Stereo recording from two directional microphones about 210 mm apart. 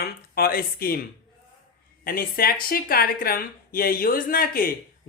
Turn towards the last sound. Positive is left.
turn(degrees=45)  # may be behind; listen again after turning